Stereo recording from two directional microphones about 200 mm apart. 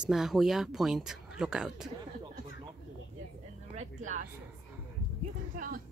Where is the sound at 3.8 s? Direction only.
40° right (ahead or behind).